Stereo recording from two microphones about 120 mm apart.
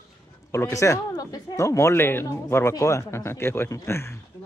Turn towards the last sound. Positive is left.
turn(degrees=20)  # may be behind; listen again after turning